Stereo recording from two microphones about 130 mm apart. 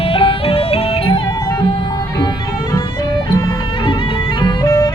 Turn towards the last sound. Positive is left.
turn(degrees=30)  # may be behind; listen again after turning